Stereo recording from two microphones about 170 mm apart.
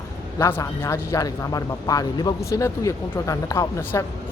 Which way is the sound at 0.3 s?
15° left (ahead or behind).